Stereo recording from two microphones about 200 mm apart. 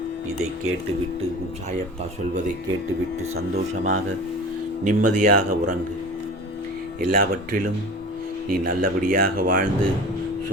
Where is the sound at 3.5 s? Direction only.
35° right (ahead or behind).